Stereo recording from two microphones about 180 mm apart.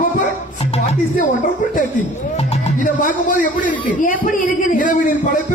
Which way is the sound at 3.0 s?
50° left (ahead or behind).